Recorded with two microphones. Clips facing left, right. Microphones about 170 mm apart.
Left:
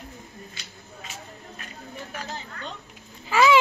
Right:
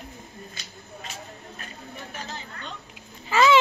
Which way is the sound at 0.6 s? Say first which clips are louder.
Right 1 dB; 45° right (ahead or behind).